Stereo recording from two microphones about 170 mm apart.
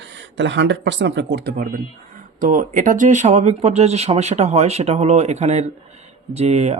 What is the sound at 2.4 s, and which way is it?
Speech, 50° right (ahead or behind).